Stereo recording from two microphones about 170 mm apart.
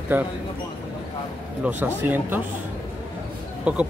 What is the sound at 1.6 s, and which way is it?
Speech, 10° right (ahead or behind).